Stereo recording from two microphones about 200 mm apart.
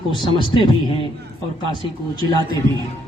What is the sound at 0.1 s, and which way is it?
Speech, 25° left (ahead or behind).